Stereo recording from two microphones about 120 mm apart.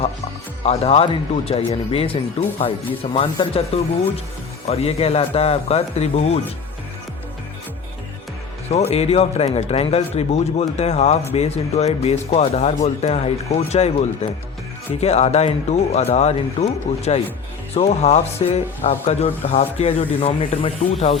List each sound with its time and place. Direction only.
0.6 s speech: 55° left (ahead or behind)
8.7 s speech: 60° left (ahead or behind)